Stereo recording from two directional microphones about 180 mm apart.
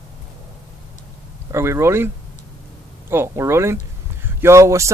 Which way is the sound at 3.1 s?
15° right (ahead or behind).